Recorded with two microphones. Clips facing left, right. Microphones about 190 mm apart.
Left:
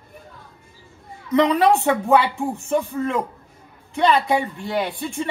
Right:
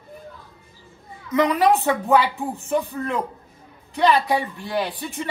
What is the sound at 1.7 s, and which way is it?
Speech, 15° left (ahead or behind).